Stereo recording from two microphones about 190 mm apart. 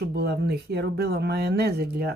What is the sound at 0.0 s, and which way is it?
Speech, 60° right (ahead or behind).